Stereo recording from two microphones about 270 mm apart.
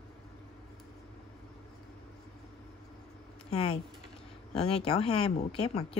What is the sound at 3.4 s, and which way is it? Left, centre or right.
Speech, left.